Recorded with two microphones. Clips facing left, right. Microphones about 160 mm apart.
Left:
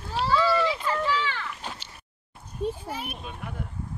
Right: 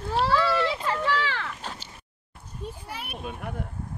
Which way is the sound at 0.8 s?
70° right (ahead or behind).